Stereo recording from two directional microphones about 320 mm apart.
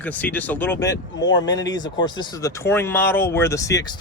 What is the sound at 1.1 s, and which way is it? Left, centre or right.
Speech, left.